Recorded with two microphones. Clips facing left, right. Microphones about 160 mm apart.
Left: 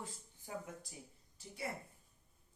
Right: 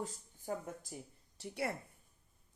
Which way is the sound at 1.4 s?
75° right (ahead or behind).